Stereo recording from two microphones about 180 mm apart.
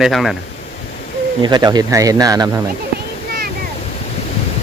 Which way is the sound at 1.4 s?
25° right (ahead or behind).